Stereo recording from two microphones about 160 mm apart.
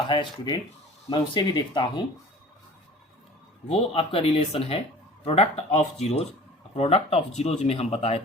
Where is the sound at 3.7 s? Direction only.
35° left (ahead or behind).